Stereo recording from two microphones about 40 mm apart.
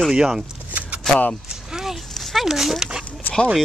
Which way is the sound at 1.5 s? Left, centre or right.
Centre.